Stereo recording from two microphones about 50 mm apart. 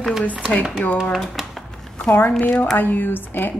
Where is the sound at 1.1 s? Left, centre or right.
Centre.